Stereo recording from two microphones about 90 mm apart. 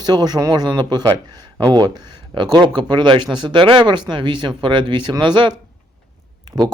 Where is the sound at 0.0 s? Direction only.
50° right (ahead or behind).